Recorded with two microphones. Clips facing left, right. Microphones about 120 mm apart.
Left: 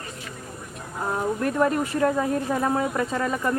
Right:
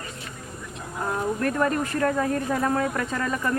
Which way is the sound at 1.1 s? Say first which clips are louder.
Left 2 dB; 15° left (ahead or behind).